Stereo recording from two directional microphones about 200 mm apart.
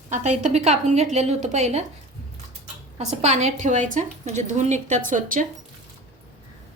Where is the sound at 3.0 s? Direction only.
35° right (ahead or behind).